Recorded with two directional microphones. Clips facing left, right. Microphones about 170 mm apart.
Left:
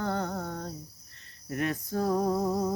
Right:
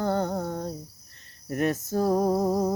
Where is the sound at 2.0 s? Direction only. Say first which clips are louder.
Right 4 dB; 35° right (ahead or behind).